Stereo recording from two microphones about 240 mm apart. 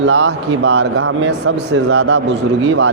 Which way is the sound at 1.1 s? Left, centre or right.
Right.